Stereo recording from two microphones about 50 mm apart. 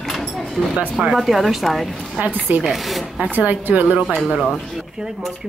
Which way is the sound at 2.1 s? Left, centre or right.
Right.